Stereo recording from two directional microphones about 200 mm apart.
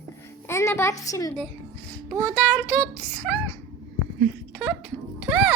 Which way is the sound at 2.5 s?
5° left (ahead or behind).